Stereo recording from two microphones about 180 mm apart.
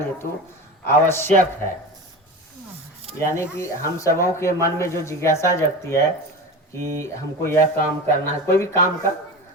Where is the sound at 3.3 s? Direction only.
15° left (ahead or behind).